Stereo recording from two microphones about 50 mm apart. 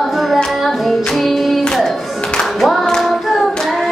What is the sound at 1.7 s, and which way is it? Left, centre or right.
Music, centre.